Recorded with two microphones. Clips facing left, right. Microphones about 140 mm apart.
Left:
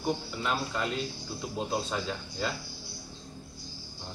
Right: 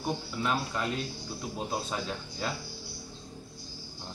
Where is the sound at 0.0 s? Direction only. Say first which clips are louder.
Left 1 dB; 5° right (ahead or behind).